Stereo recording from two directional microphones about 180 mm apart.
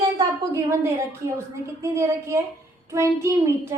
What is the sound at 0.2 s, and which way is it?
A woman's voice, 15° right (ahead or behind).